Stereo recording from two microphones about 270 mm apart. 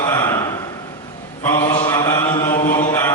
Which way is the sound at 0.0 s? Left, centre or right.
Centre.